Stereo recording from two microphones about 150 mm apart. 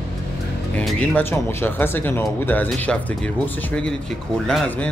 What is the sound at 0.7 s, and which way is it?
Speech, 10° left (ahead or behind).